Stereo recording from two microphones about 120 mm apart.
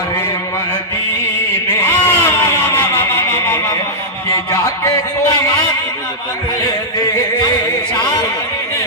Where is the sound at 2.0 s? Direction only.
20° left (ahead or behind).